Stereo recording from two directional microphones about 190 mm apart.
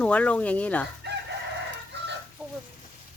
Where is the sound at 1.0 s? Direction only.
65° right (ahead or behind).